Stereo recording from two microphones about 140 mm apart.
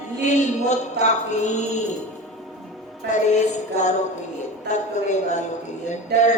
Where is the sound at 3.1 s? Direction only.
60° left (ahead or behind).